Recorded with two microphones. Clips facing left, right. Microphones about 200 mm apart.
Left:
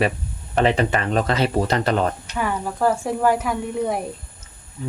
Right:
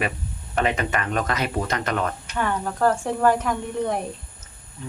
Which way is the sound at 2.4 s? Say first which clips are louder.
Even; 5° left (ahead or behind).